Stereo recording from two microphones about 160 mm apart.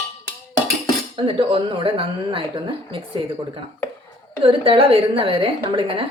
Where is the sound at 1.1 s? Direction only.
35° right (ahead or behind).